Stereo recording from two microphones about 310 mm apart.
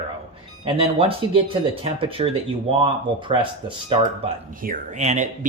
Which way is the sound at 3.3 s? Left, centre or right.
Centre.